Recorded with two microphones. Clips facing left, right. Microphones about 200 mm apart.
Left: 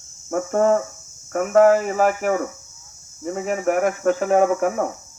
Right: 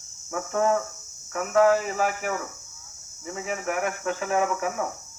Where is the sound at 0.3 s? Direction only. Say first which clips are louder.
Left 6 dB; 50° left (ahead or behind).